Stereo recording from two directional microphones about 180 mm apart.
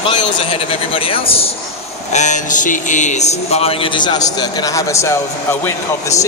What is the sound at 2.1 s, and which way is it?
A man's voice, 40° left (ahead or behind).